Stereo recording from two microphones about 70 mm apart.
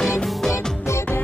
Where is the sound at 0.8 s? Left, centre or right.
Left.